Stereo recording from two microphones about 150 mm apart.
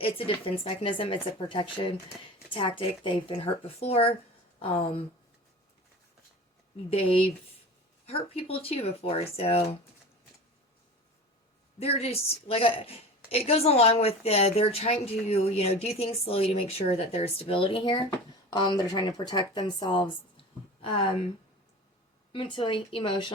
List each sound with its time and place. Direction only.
0.0 s a woman's voice: 35° left (ahead or behind)
6.9 s a woman's voice: 40° left (ahead or behind)
11.8 s a woman's voice: 40° left (ahead or behind)
22.3 s a woman's voice: 35° left (ahead or behind)